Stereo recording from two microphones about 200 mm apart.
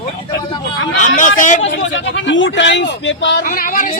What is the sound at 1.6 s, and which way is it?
Speech, 70° left (ahead or behind).